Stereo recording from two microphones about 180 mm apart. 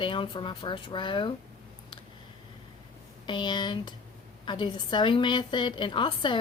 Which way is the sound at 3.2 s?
25° left (ahead or behind).